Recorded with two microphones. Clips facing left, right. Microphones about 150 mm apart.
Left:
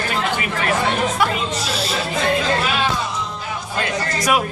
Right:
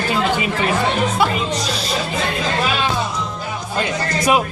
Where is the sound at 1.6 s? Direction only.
5° left (ahead or behind).